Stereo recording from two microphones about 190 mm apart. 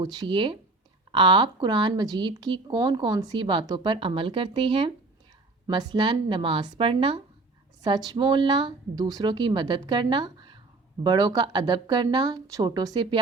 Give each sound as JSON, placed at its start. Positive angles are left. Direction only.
{"t": 0.0, "sound": "speech", "side_deg": -20}